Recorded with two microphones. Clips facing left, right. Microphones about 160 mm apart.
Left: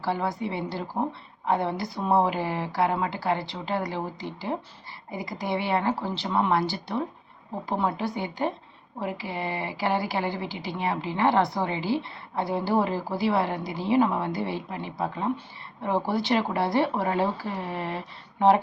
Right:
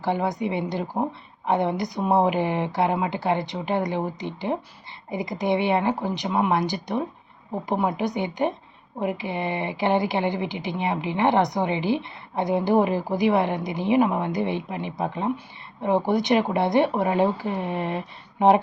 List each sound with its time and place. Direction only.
0.0 s a woman's voice: 20° right (ahead or behind)